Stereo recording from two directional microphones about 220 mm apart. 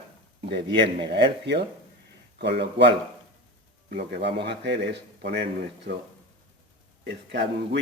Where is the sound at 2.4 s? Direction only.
50° right (ahead or behind).